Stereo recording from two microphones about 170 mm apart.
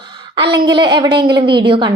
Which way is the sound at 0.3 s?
25° right (ahead or behind).